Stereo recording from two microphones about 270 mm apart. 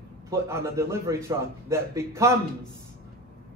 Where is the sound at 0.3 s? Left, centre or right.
Centre.